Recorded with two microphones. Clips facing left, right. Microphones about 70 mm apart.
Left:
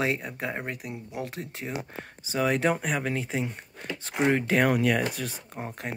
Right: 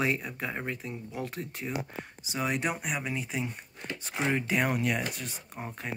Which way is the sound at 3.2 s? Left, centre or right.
Left.